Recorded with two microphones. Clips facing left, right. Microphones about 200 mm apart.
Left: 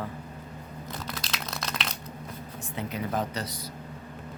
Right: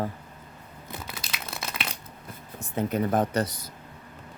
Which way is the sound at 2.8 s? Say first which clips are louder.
Right 6 dB; 50° right (ahead or behind).